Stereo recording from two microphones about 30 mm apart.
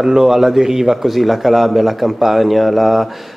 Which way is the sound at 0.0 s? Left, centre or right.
Centre.